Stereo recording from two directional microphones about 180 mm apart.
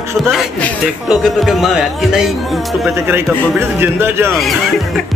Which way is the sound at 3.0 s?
15° right (ahead or behind).